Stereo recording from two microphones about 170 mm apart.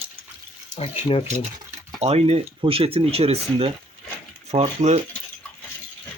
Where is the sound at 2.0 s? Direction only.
40° right (ahead or behind).